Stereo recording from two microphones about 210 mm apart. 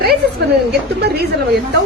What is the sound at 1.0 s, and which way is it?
Speech, 50° right (ahead or behind).